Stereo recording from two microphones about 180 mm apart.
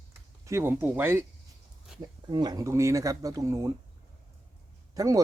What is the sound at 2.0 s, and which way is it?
Speech, 20° right (ahead or behind).